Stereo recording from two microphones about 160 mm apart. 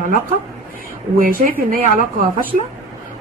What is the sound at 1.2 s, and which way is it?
Speech, 60° right (ahead or behind).